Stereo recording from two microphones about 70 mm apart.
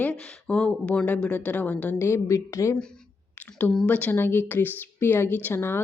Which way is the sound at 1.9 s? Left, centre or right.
Left.